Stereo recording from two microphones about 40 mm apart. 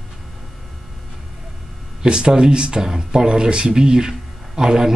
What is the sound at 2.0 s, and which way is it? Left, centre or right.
Speech, right.